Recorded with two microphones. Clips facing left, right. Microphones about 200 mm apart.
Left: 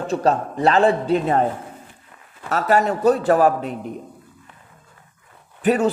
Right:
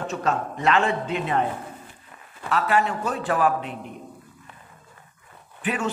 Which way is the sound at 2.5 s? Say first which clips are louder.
Left 4 dB; 40° left (ahead or behind).